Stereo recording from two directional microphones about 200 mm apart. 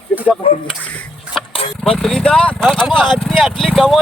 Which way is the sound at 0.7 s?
5° left (ahead or behind).